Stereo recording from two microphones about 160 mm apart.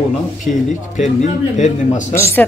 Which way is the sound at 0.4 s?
50° left (ahead or behind).